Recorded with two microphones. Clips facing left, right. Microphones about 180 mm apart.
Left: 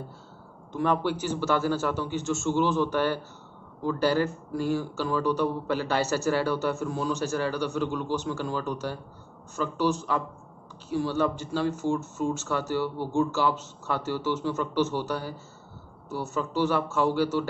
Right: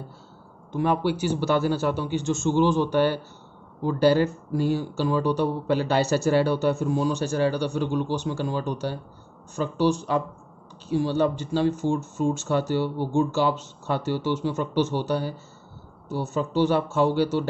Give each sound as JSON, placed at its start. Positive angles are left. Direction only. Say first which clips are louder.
{"t": 0.8, "sound": "a man's voice", "louder": "right 3 dB", "side_deg": -10}